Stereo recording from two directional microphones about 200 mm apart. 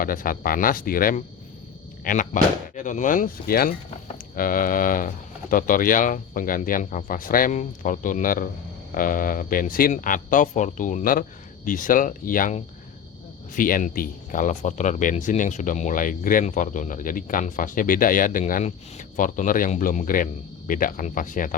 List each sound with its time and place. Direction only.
0.0 s speech: 45° left (ahead or behind)